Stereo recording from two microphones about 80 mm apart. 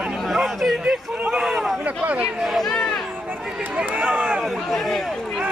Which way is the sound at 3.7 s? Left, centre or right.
Centre.